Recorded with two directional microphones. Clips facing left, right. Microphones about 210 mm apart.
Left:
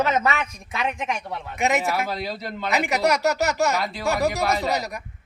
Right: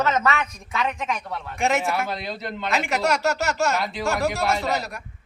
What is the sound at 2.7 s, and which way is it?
Speech, 15° left (ahead or behind).